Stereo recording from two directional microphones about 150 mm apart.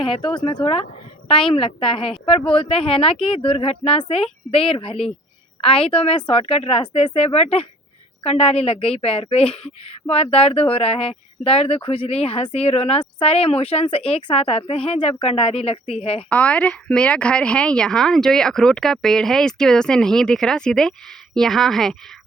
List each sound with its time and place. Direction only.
0.0 s speech: 35° left (ahead or behind)
16.3 s a woman's voice: 10° left (ahead or behind)